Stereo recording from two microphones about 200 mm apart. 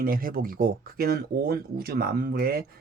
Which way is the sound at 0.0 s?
45° right (ahead or behind).